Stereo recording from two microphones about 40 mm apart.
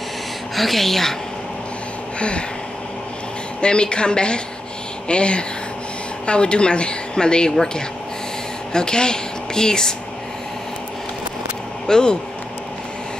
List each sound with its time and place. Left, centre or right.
0.6 s speech: centre
2.1 s a sound: left
3.6 s a woman's voice: left
8.7 s speech: centre
11.9 s a woman's voice: left